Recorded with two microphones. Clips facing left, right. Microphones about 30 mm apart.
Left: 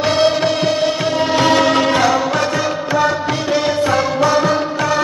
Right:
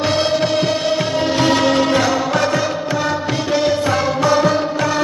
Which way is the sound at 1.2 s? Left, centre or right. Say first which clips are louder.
Left 3 dB; left.